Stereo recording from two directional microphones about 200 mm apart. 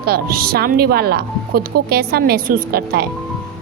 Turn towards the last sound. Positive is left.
turn(degrees=-50)  # may be behind; listen again after turning